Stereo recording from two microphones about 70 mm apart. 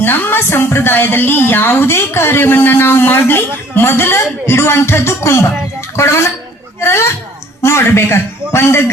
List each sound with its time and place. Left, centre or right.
0.0 s a woman's voice: left